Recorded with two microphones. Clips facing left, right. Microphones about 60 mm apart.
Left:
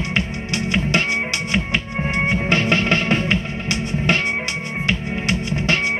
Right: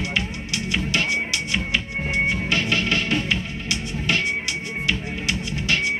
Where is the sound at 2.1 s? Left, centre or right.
Left.